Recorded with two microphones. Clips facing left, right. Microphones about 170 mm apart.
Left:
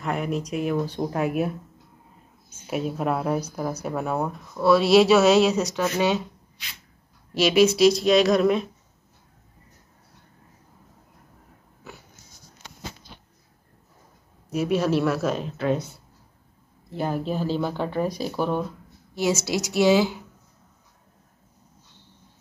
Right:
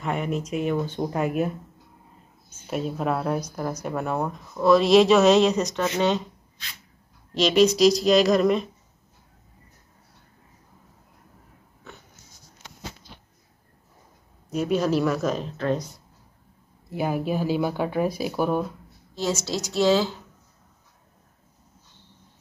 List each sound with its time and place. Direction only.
0.0 s speech: centre (ahead or behind)
2.6 s speech: 5° left (ahead or behind)
7.3 s speech: 5° left (ahead or behind)
14.5 s speech: 5° left (ahead or behind)
16.9 s speech: 10° right (ahead or behind)
19.1 s speech: 10° left (ahead or behind)